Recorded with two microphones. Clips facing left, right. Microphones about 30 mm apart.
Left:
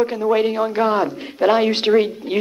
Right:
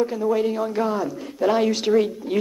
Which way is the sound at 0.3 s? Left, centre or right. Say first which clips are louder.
Left 4 dB; left.